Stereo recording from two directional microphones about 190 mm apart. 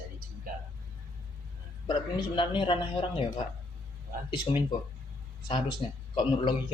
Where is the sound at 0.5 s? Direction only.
50° right (ahead or behind).